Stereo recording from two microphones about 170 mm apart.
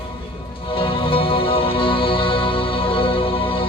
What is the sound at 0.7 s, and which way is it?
Music, 30° left (ahead or behind).